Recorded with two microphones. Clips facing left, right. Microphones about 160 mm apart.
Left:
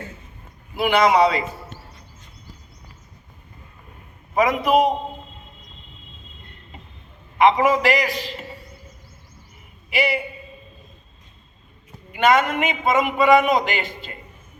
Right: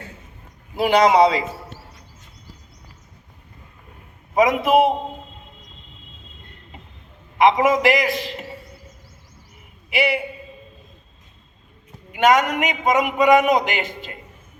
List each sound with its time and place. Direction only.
0.8 s a man's voice: 35° right (ahead or behind)
4.4 s a man's voice: 20° right (ahead or behind)
7.3 s a man's voice: 15° right (ahead or behind)
12.1 s a man's voice: 15° right (ahead or behind)